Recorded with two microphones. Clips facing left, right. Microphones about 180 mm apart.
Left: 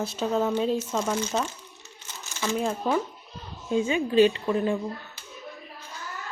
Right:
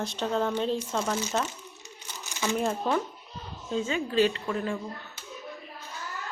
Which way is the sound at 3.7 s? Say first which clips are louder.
Left 5 dB; 15° left (ahead or behind).